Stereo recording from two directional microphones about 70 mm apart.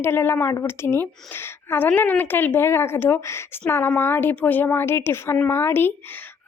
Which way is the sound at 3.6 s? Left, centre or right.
Left.